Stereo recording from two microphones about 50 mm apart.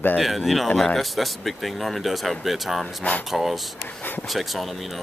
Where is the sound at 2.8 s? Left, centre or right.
Left.